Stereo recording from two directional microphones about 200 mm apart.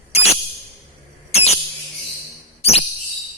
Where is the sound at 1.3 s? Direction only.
30° left (ahead or behind).